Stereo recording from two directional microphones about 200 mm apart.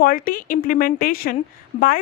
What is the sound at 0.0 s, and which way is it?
Speech, 45° left (ahead or behind).